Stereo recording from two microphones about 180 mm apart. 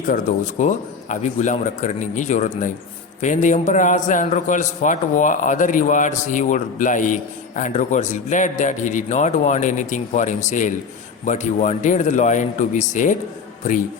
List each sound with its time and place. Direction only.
0.1 s a man's voice: 45° left (ahead or behind)